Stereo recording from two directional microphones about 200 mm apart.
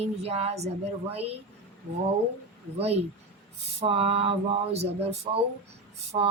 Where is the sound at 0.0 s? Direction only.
30° right (ahead or behind).